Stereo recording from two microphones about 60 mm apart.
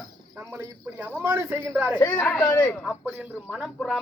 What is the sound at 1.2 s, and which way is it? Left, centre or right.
Speech, right.